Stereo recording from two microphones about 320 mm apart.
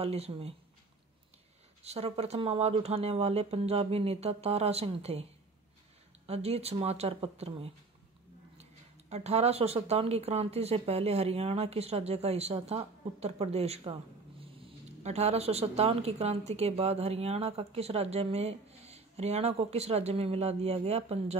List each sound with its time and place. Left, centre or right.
0.0 s speech: centre
1.8 s speech: centre
6.2 s speech: centre
9.1 s speech: centre